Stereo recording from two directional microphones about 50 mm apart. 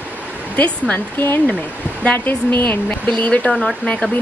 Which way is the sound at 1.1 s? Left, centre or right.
Left.